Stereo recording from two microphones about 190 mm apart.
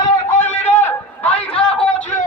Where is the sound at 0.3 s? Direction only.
10° left (ahead or behind).